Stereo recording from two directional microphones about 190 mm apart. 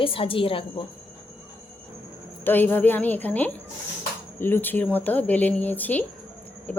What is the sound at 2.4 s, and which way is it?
Speech, 10° left (ahead or behind).